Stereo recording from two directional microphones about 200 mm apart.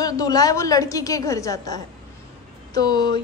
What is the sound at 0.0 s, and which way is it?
A woman's voice, 20° left (ahead or behind).